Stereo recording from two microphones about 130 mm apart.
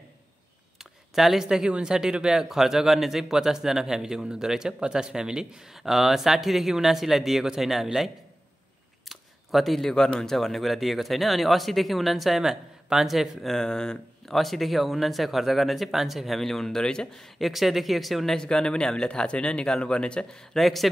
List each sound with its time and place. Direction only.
1.1 s speech: centre (ahead or behind)
9.1 s speech: centre (ahead or behind)